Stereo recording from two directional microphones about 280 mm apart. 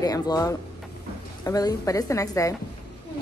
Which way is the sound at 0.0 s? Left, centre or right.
Centre.